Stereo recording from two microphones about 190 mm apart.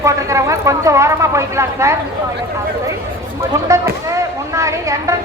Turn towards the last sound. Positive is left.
turn(degrees=-15)  # may be behind; listen again after turning